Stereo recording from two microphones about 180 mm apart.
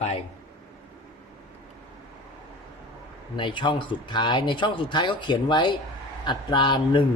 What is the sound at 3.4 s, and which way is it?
Speech, 25° left (ahead or behind).